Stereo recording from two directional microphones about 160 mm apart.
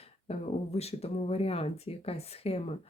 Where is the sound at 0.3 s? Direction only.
40° left (ahead or behind).